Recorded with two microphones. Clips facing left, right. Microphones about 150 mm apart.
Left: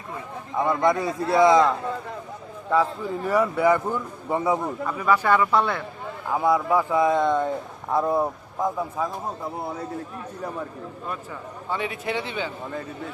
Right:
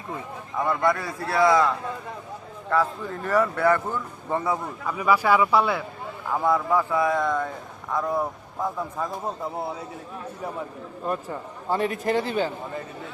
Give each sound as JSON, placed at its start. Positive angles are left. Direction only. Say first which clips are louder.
{"t": 0.5, "sound": "a man's voice", "louder": "left 2 dB", "side_deg": 20}
{"t": 4.8, "sound": "speech", "louder": "even", "side_deg": -5}
{"t": 6.3, "sound": "a man's voice", "louder": "left 1 dB", "side_deg": 10}
{"t": 9.0, "sound": "speech", "louder": "left 2 dB", "side_deg": 5}
{"t": 11.1, "sound": "a man's voice", "louder": "right 8 dB", "side_deg": -40}